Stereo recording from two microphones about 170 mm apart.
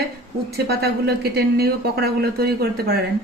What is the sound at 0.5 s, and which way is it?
Speech, 70° right (ahead or behind).